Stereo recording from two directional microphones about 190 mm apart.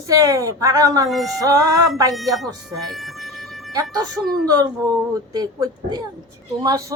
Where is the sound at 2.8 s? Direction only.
Centre (ahead or behind).